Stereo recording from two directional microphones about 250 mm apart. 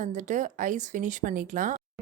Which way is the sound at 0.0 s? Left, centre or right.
Right.